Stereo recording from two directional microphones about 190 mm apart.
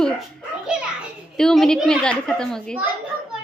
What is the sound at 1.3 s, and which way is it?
Speech, centre (ahead or behind).